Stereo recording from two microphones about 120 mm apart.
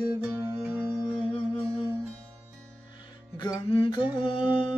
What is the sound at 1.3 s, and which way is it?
Music, 45° left (ahead or behind).